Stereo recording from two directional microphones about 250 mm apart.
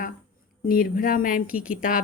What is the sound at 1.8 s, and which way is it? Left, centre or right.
Speech, left.